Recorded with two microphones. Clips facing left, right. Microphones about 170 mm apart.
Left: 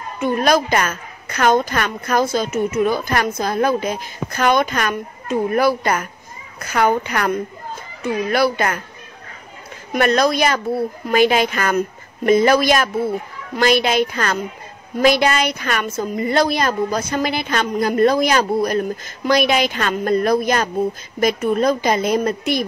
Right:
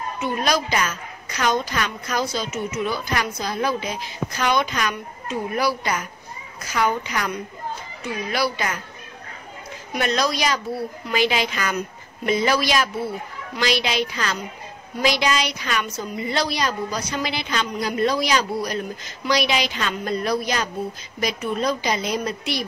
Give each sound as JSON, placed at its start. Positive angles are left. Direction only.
{"t": 0.2, "sound": "a woman's voice", "side_deg": 50}
{"t": 9.9, "sound": "a woman's voice", "side_deg": 55}